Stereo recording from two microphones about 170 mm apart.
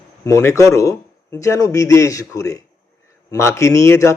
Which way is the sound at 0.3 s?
15° left (ahead or behind).